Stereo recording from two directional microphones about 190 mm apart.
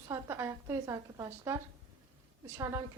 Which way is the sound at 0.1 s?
15° right (ahead or behind).